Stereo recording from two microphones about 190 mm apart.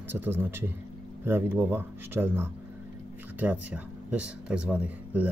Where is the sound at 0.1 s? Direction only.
10° right (ahead or behind).